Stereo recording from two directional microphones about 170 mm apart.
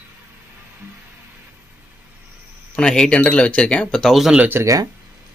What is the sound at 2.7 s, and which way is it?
Speech, 5° left (ahead or behind).